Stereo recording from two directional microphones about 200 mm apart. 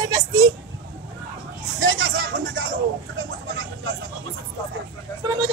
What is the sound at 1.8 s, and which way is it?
Hubbub, 80° right.